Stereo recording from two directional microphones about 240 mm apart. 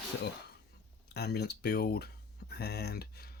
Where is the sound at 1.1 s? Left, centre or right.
Left.